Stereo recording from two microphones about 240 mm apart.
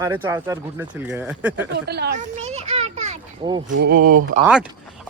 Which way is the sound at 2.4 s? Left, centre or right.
Right.